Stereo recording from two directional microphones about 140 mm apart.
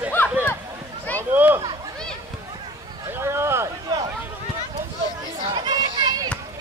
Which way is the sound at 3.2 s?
20° right (ahead or behind).